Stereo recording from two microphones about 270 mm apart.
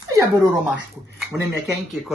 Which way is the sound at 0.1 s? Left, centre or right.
Centre.